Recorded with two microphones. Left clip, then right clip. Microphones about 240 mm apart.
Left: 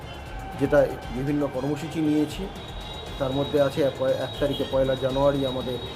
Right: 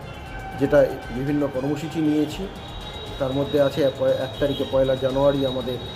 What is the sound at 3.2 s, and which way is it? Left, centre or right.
Speech, centre.